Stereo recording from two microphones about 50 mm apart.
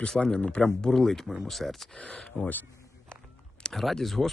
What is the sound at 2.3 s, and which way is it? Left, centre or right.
Speech, left.